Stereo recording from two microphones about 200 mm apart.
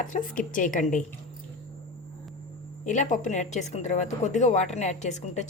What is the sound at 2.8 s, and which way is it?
A woman's voice, 40° left (ahead or behind).